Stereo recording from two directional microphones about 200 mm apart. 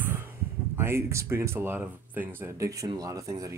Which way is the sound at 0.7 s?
10° right (ahead or behind).